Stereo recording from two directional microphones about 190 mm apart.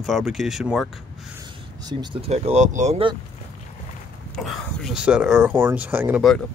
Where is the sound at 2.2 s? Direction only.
35° right (ahead or behind).